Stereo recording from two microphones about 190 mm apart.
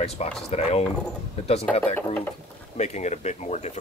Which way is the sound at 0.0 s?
35° left (ahead or behind).